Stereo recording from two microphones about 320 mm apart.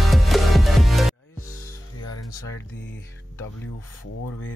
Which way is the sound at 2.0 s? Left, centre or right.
Left.